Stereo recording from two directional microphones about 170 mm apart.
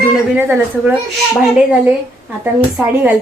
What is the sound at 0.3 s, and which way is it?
Speech, 10° right (ahead or behind).